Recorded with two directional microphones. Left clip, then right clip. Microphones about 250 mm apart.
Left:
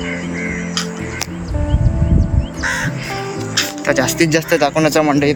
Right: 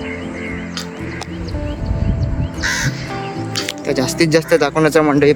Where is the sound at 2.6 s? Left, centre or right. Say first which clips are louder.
Even; left.